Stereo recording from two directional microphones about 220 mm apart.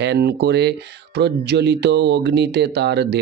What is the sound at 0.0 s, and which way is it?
Speech, 50° right (ahead or behind).